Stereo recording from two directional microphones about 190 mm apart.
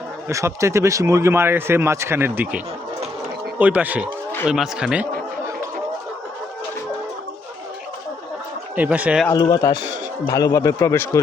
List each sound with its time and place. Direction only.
0.3 s speech: 15° right (ahead or behind)
3.6 s speech: 10° right (ahead or behind)
8.7 s speech: 10° right (ahead or behind)
9.3 s a man's voice: 20° left (ahead or behind)